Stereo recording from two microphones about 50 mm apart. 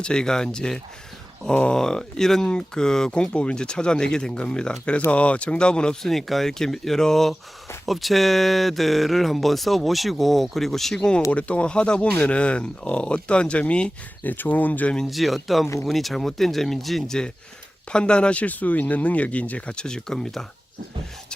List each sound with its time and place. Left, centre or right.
0.0 s speech: centre
11.3 s speech: left
14.3 s speech: left
15.0 s speech: centre
17.9 s speech: centre